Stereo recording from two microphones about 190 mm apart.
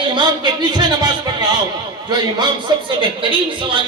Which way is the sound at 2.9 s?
25° right (ahead or behind).